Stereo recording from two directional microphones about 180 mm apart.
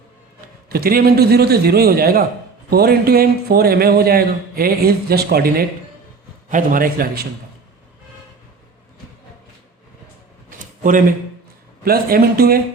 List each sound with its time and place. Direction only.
0.4 s a man's voice: 55° right (ahead or behind)
11.9 s a man's voice: 55° right (ahead or behind)